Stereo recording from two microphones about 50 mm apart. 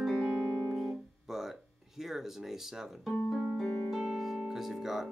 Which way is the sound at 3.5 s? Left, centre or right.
Centre.